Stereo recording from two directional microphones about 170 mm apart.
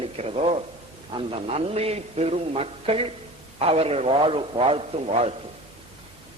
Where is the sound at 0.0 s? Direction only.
35° right (ahead or behind).